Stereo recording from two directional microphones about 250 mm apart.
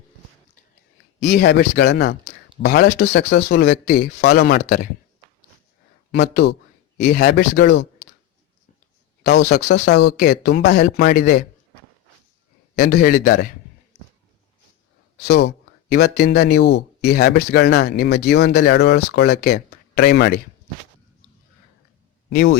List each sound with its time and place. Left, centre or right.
1.2 s speech: left
6.1 s speech: left
9.2 s speech: left
12.7 s speech: left
15.2 s speech: left
22.3 s speech: left